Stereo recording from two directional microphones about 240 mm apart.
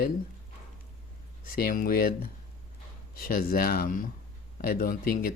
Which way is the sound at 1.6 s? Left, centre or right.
Left.